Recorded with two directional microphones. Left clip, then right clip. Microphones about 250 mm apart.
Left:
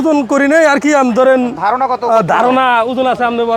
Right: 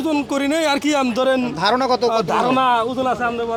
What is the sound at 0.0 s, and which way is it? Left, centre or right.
Speech, left.